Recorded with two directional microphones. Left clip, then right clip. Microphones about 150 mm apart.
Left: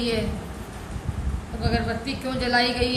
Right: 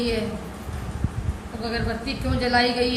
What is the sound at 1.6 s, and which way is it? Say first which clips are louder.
A woman's voice: left 1 dB; 15° left (ahead or behind).